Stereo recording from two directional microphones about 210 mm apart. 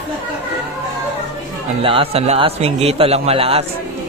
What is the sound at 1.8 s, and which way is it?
A man's voice, 25° right (ahead or behind).